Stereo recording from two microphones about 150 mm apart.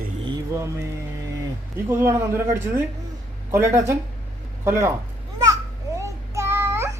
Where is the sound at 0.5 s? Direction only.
20° right (ahead or behind).